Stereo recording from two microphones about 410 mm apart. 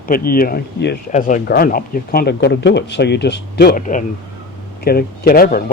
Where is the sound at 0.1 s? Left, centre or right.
Left.